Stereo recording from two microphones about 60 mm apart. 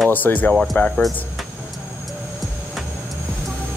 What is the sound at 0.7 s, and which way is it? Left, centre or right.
Speech, centre.